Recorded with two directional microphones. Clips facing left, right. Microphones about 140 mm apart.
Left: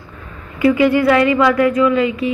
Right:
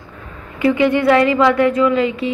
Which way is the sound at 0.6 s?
25° right (ahead or behind).